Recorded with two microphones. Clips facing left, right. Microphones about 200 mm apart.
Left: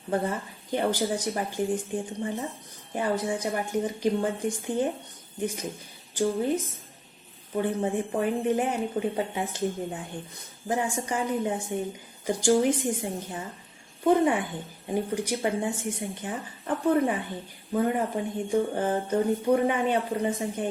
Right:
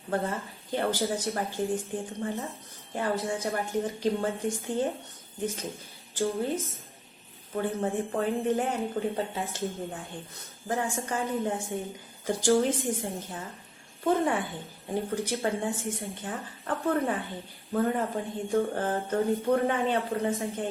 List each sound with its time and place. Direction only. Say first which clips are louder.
0.1 s a woman's voice: left 2 dB; 15° left (ahead or behind)
7.5 s a woman's voice: left 2 dB; 15° left (ahead or behind)